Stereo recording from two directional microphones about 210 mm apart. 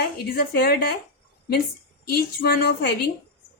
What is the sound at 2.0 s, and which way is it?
A woman's voice, 45° left (ahead or behind).